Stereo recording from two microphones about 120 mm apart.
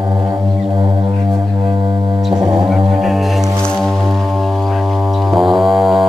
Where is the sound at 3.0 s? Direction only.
Centre (ahead or behind).